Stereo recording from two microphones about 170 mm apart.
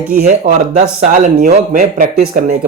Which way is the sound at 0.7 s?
45° right (ahead or behind).